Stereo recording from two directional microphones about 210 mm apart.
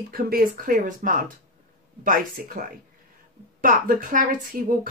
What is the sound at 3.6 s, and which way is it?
Speech, 40° right (ahead or behind).